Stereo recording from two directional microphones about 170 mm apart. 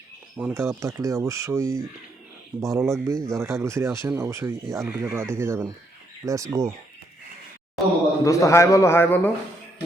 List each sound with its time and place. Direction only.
0.3 s speech: 10° right (ahead or behind)
8.2 s a man's voice: 20° left (ahead or behind)